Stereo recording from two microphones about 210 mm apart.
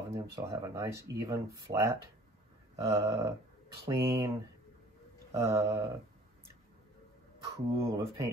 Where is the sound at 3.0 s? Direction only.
15° right (ahead or behind).